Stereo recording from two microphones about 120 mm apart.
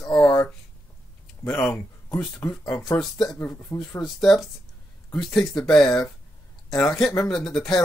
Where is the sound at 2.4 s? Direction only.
15° left (ahead or behind).